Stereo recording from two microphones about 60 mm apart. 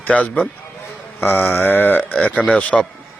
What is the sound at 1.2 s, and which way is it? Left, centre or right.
A man's voice, left.